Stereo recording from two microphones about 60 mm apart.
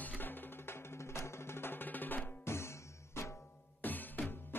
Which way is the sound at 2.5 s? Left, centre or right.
Left.